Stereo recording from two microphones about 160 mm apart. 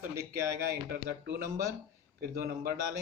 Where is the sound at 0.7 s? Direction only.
75° right (ahead or behind).